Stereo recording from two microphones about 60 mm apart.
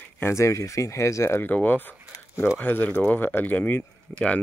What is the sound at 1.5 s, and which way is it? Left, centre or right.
Speech, left.